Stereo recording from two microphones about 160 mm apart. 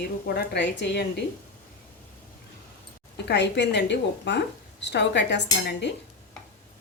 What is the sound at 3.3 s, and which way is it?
Speech, 90° left.